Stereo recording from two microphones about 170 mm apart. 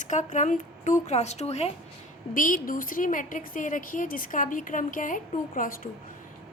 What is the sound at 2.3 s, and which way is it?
A woman's voice, 55° left (ahead or behind).